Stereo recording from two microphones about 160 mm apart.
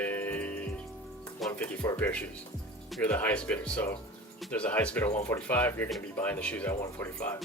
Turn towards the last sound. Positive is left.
turn(degrees=15)  # may be behind; listen again after turning